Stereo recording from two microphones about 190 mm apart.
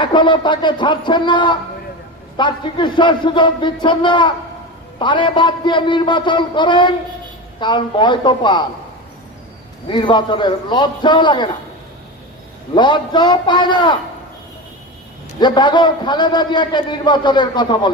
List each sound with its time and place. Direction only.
0.0 s a man's voice: 25° left (ahead or behind)
9.8 s a man's voice: 25° left (ahead or behind)
12.7 s a man's voice: 25° left (ahead or behind)
15.3 s a man's voice: 25° left (ahead or behind)